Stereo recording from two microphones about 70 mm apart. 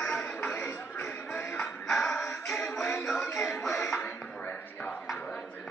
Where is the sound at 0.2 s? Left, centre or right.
Centre.